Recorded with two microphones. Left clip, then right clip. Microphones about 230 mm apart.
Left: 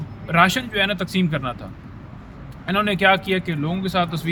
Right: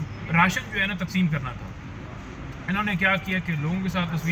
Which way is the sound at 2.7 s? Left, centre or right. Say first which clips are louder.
Left 6 dB; left.